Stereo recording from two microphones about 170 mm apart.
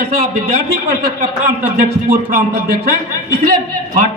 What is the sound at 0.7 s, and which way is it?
Speech, 65° right (ahead or behind).